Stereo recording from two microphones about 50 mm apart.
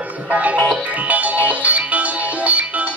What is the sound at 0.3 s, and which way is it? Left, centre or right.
Music, right.